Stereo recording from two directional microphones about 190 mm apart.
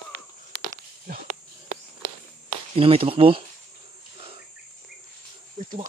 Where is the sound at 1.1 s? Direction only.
45° right (ahead or behind).